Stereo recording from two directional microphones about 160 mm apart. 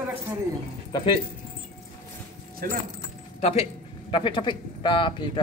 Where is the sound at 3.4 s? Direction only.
40° left (ahead or behind).